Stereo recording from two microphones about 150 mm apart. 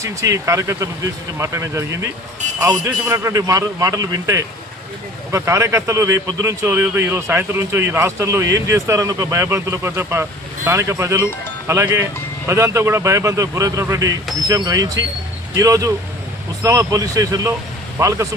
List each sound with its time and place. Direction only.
0.0 s speech: 20° right (ahead or behind)